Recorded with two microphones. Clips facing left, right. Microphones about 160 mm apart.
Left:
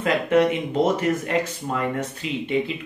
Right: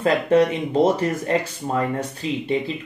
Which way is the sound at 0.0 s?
35° right (ahead or behind).